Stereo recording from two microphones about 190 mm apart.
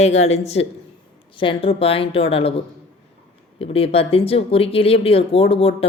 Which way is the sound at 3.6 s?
30° left (ahead or behind).